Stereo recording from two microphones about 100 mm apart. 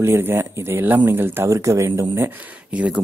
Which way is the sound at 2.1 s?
20° right (ahead or behind).